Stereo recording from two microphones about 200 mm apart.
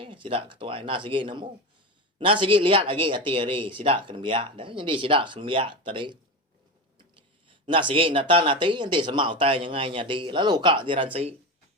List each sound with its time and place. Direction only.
0.0 s speech: 25° right (ahead or behind)
7.7 s speech: 25° right (ahead or behind)